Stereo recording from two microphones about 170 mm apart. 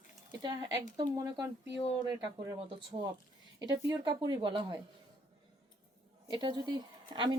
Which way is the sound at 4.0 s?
25° right (ahead or behind).